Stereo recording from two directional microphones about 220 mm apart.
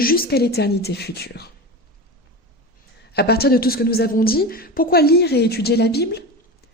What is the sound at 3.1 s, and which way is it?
Speech, 45° left (ahead or behind).